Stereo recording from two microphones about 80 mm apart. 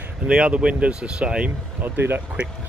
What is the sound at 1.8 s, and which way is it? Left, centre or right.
Speech, right.